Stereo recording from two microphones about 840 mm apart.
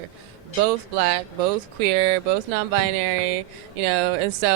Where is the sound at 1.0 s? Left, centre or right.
Right.